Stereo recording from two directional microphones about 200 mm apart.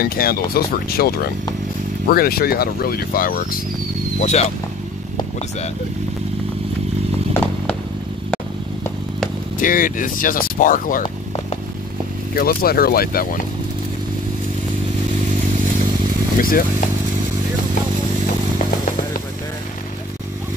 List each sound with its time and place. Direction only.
0.0 s speech: 50° left (ahead or behind)
4.2 s speech: 35° left (ahead or behind)
9.6 s speech: 45° left (ahead or behind)
12.4 s speech: 50° left (ahead or behind)
16.3 s speech: 45° left (ahead or behind)